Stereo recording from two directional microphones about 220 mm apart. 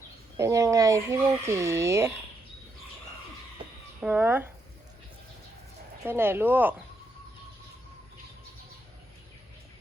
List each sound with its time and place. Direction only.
0.3 s speech: 15° right (ahead or behind)
4.0 s speech: 10° right (ahead or behind)
6.1 s speech: 10° right (ahead or behind)